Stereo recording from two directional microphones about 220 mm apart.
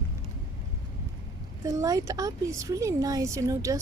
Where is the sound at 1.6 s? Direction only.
15° right (ahead or behind).